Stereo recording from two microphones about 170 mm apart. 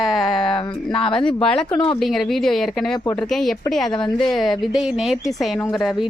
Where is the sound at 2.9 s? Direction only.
20° left (ahead or behind).